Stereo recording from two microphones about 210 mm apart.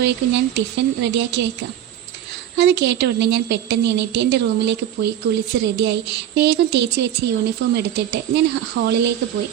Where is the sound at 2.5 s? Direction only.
55° right (ahead or behind).